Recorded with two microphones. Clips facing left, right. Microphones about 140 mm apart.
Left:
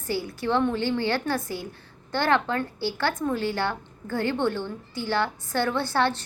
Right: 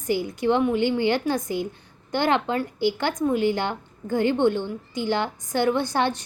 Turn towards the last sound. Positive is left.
turn(degrees=-15)  # may be behind; listen again after turning